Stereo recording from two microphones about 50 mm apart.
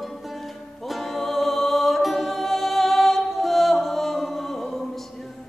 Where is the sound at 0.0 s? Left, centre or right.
Centre.